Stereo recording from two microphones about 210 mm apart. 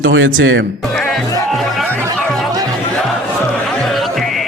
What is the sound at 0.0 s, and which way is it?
Speech, 65° right (ahead or behind).